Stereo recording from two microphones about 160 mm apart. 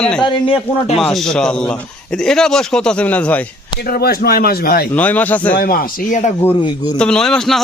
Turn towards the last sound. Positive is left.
turn(degrees=0)  # may be behind; listen again after turning